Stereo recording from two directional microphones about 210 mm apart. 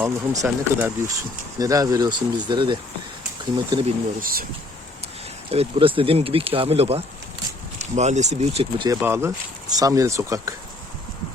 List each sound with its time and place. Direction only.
0.0 s speech: 10° right (ahead or behind); by 3.9 s 25° right (ahead or behind)
4.2 s speech: 45° right (ahead or behind)
5.5 s speech: 25° right (ahead or behind)
8.9 s speech: 10° right (ahead or behind)